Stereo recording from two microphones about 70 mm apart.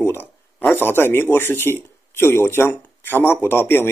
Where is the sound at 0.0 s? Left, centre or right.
Left.